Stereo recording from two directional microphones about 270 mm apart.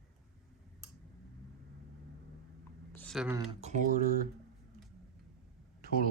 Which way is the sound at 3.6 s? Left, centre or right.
Right.